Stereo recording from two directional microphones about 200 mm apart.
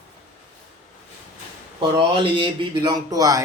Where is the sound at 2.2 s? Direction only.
25° right (ahead or behind).